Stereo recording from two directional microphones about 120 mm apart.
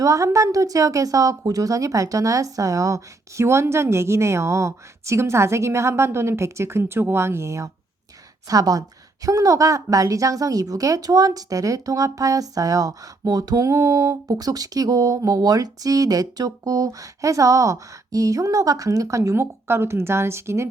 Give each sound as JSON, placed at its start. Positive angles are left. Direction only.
{"t": 0.0, "sound": "a woman's voice", "side_deg": -25}